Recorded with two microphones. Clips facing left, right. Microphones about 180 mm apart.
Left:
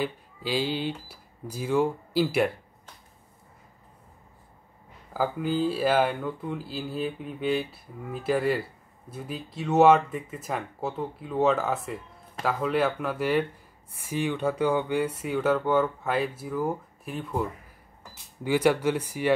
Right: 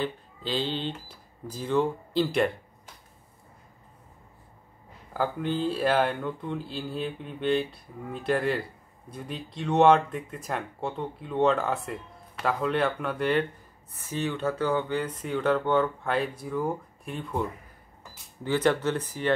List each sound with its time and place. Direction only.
0.0 s speech: 10° left (ahead or behind)
5.1 s speech: 5° left (ahead or behind)